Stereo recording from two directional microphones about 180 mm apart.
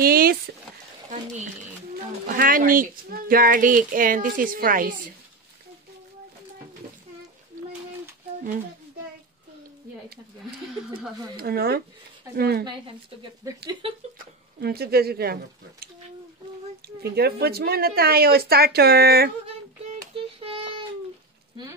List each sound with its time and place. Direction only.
0.0 s a sound: 55° right (ahead or behind)
2.2 s a child's voice: 50° right (ahead or behind)
11.3 s a woman's voice: 60° right (ahead or behind)
12.6 s speech: 25° right (ahead or behind)
14.1 s a woman's voice: 60° right (ahead or behind)
16.8 s a woman's voice: 60° right (ahead or behind)
20.2 s child singing: 30° right (ahead or behind)